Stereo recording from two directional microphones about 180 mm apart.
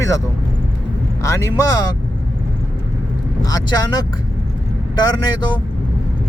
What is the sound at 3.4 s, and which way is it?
Speech, 20° left (ahead or behind).